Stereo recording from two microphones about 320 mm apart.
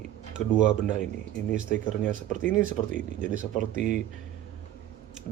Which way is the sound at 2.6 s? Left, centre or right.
Right.